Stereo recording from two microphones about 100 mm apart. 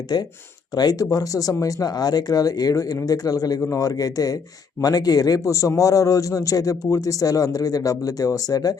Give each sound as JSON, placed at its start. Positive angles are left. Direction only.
{"t": 0.1, "sound": "a man's voice", "side_deg": 45}